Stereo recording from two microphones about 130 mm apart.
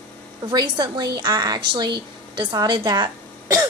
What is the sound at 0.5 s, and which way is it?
A woman's voice, 35° right (ahead or behind).